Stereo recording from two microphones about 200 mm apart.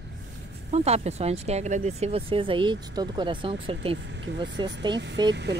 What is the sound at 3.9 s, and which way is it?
Speech, 65° right (ahead or behind).